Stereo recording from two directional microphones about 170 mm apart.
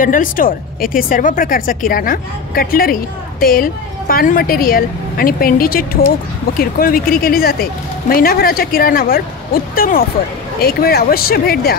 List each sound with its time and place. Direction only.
0.0 s speech: 55° left (ahead or behind)